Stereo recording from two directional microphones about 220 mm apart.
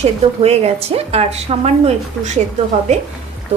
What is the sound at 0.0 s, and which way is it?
A woman's voice, 30° right (ahead or behind).